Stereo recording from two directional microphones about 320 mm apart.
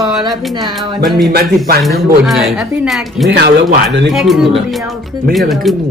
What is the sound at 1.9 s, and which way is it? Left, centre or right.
A woman's voice, centre.